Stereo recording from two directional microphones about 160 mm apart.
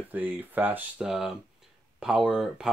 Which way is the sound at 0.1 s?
10° right (ahead or behind).